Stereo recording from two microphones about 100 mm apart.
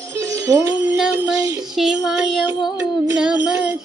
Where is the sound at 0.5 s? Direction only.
30° right (ahead or behind).